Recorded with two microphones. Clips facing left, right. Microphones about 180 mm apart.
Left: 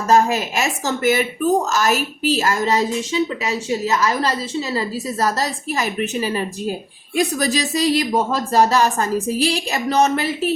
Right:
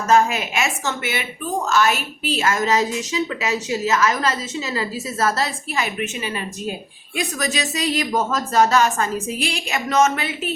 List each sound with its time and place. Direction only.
0.1 s a woman's voice: 35° left (ahead or behind)